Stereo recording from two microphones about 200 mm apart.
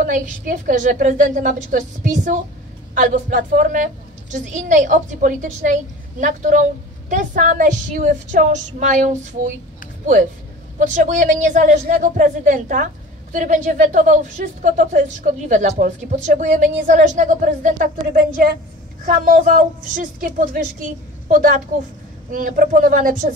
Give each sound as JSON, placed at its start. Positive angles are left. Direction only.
{"t": 0.0, "sound": "a woman's voice", "side_deg": -40}
{"t": 10.8, "sound": "a woman's voice", "side_deg": -40}